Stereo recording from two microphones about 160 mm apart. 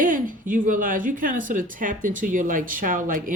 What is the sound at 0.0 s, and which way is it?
A woman's voice, 55° right (ahead or behind).